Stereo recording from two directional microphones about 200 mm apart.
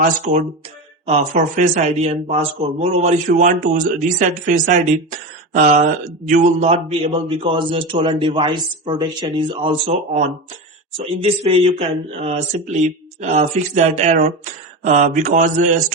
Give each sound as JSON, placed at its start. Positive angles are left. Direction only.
{"t": 0.3, "sound": "speech", "side_deg": -35}
{"t": 10.9, "sound": "speech", "side_deg": -30}